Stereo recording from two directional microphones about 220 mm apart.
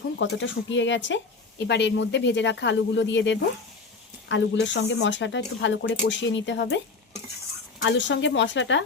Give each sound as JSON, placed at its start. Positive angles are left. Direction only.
{"t": 0.2, "sound": "speech", "side_deg": 55}
{"t": 7.8, "sound": "speech", "side_deg": 55}